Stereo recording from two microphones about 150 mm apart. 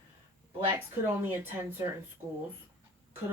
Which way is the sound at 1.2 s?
15° right (ahead or behind).